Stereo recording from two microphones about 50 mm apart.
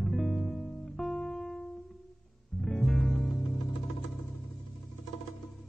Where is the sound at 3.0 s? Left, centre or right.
Left.